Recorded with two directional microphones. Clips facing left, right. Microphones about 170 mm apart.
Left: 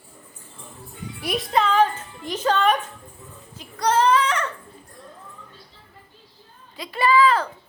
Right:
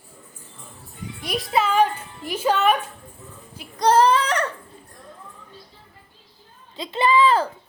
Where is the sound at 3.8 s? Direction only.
35° right (ahead or behind).